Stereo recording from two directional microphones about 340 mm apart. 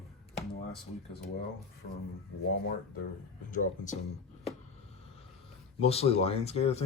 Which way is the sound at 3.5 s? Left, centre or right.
Left.